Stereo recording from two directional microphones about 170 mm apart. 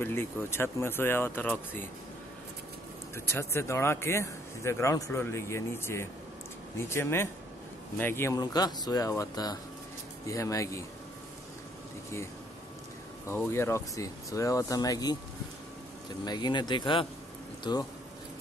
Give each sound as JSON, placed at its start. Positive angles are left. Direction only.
{"t": 0.0, "sound": "speech", "side_deg": 15}
{"t": 3.3, "sound": "speech", "side_deg": 15}
{"t": 13.3, "sound": "speech", "side_deg": 15}